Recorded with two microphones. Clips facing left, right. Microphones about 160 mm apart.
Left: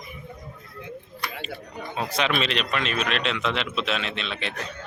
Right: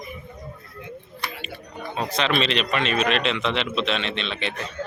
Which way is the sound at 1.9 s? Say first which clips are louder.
Right 2 dB; 10° left (ahead or behind).